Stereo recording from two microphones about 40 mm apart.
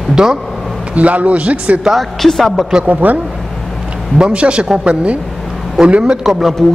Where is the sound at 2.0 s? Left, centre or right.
Centre.